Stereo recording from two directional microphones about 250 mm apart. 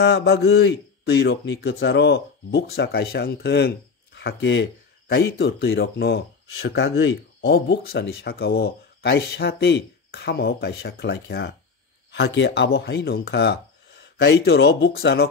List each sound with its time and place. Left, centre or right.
0.0 s a man's voice: left